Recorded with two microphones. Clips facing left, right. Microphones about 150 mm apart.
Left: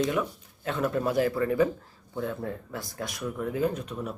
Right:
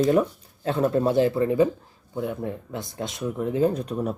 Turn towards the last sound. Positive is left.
turn(degrees=-40)  # may be behind; listen again after turning